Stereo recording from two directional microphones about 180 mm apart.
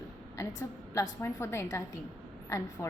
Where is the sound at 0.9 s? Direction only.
15° left (ahead or behind).